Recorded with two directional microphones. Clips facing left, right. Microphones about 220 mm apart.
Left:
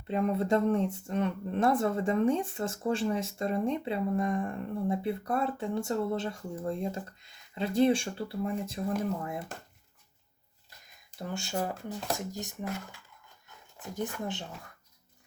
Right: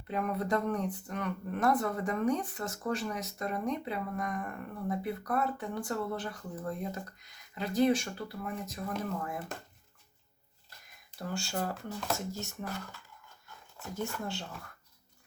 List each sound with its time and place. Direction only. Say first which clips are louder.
0.1 s speech: left 4 dB; 25° left (ahead or behind)
11.2 s speech: left 2 dB; 20° left (ahead or behind)